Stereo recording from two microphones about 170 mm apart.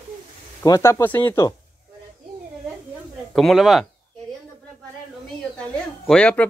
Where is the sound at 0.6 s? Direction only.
20° left (ahead or behind).